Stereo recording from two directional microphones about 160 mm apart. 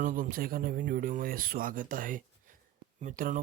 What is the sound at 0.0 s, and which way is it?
Speech, 55° right (ahead or behind).